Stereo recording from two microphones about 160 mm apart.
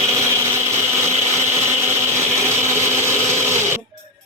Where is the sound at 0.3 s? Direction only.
15° right (ahead or behind).